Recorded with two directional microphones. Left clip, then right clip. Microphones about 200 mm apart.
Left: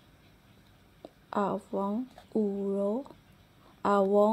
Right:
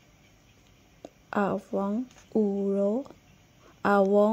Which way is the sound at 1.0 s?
20° right (ahead or behind).